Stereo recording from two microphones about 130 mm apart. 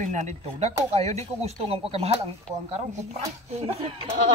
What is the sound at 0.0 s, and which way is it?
A woman's voice, 65° right (ahead or behind).